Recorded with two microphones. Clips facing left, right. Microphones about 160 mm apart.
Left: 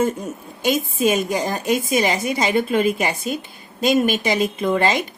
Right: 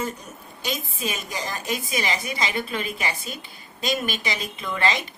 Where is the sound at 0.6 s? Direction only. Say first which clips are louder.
Left 11 dB; 50° left (ahead or behind).